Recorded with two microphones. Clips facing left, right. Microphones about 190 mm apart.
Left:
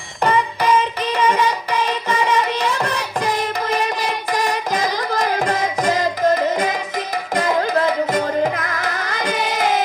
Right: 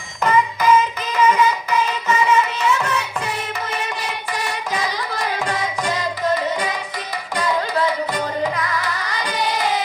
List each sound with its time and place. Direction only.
0.2 s music: 30° left (ahead or behind)
4.4 s carnatic music: 40° left (ahead or behind)
7.3 s music: 45° left (ahead or behind)